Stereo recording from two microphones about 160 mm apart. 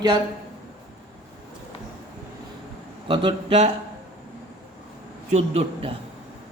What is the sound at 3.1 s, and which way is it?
Speech, 35° right (ahead or behind).